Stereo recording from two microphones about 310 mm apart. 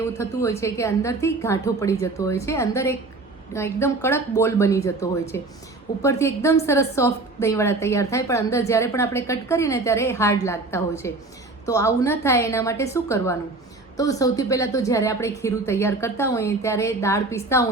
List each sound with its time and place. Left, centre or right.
0.2 s a woman's voice: centre